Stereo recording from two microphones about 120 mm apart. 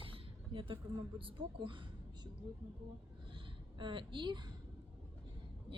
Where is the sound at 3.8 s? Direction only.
45° right (ahead or behind).